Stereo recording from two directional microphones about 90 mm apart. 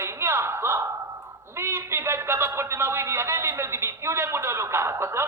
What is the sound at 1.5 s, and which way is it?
A man's voice, 30° right (ahead or behind).